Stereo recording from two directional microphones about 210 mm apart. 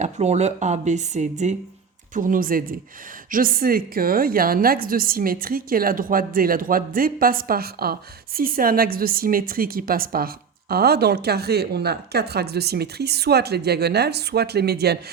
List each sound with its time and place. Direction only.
0.0 s a woman's voice: 30° right (ahead or behind); by 14.9 s 50° right (ahead or behind)